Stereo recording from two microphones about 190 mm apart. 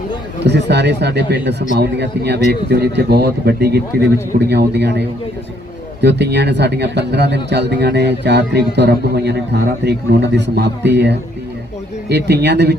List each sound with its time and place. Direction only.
0.4 s speech: 60° right (ahead or behind)